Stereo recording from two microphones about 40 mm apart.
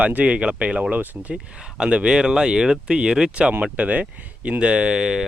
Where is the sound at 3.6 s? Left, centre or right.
Right.